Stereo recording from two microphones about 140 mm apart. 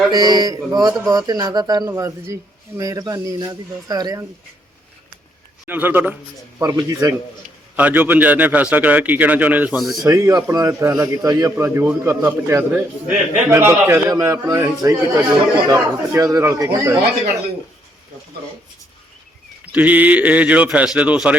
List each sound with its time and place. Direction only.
0.1 s a man's voice: 30° right (ahead or behind)
5.6 s a man's voice: 15° right (ahead or behind)
6.6 s a man's voice: 25° right (ahead or behind)
7.8 s a man's voice: 10° right (ahead or behind)
9.7 s speech: centre (ahead or behind)
10.0 s a man's voice: 20° right (ahead or behind)
19.7 s a man's voice: 10° right (ahead or behind)